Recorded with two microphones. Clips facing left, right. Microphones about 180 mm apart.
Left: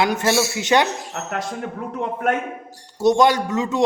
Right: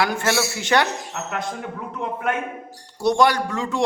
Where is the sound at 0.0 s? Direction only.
20° left (ahead or behind).